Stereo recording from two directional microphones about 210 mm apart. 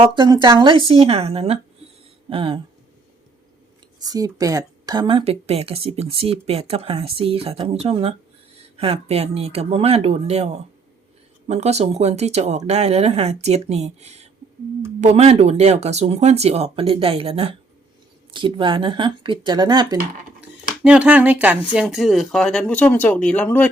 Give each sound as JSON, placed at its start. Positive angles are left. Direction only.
{"t": 0.0, "sound": "speech", "side_deg": -20}
{"t": 4.0, "sound": "speech", "side_deg": -15}
{"t": 20.8, "sound": "speech", "side_deg": -5}